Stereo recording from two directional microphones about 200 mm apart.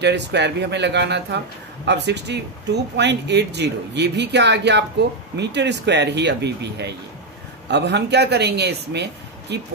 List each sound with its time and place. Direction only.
0.0 s speech: 60° right (ahead or behind)